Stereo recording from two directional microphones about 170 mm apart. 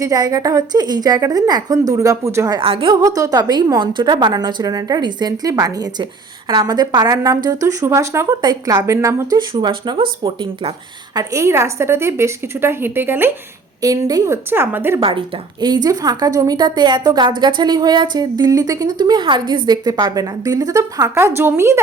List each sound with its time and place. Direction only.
0.0 s a woman's voice: 20° right (ahead or behind)
2.6 s a woman's voice: 30° right (ahead or behind)
2.9 s a woman's voice: 20° right (ahead or behind)
11.2 s a woman's voice: 20° right (ahead or behind)
15.6 s a woman's voice: 25° right (ahead or behind)